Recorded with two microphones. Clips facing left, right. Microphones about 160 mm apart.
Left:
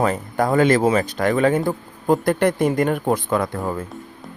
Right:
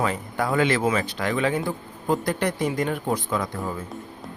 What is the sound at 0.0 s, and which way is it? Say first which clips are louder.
Speech: left 5 dB; 45° left (ahead or behind).